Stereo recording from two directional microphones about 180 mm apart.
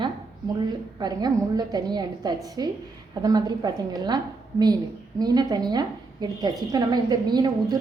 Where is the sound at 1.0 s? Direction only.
20° right (ahead or behind).